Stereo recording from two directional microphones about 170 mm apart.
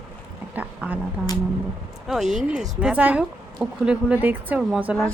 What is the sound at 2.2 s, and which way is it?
Speech, 45° right (ahead or behind).